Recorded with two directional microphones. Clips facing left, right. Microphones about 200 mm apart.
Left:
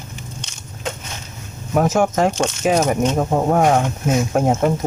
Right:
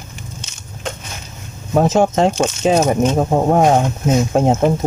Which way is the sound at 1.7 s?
25° right (ahead or behind).